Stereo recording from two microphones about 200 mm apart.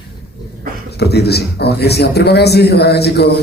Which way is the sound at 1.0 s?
55° left (ahead or behind).